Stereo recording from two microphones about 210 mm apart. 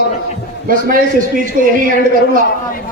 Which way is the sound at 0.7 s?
45° right (ahead or behind).